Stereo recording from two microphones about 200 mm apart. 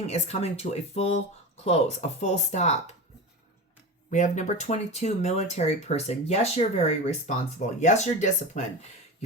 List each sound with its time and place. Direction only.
0.1 s speech: 35° left (ahead or behind)
4.1 s speech: 35° left (ahead or behind)